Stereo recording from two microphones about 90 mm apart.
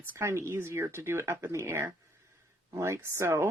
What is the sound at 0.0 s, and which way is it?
A woman's voice, 25° right (ahead or behind).